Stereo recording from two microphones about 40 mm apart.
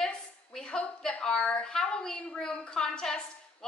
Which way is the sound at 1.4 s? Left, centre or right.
Left.